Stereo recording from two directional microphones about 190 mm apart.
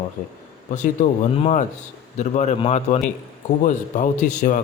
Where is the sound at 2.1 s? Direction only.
35° left (ahead or behind).